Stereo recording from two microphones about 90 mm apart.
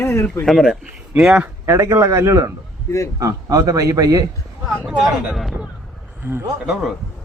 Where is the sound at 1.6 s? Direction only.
35° right (ahead or behind).